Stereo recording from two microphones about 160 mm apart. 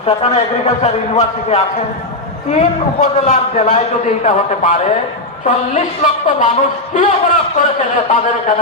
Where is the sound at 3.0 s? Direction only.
45° left (ahead or behind).